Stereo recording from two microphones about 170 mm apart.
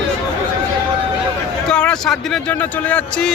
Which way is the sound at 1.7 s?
5° left (ahead or behind).